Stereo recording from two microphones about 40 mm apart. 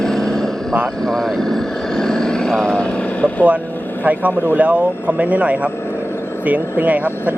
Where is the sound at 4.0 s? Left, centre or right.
Right.